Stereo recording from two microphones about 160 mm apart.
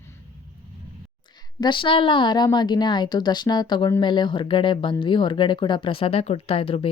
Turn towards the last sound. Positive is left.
turn(degrees=35)  # may be behind; listen again after turning